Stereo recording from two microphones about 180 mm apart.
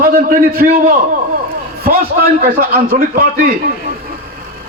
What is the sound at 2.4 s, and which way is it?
Speech, 55° right (ahead or behind).